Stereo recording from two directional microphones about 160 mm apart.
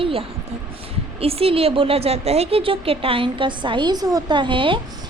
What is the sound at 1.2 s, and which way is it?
A woman's voice, 35° right (ahead or behind).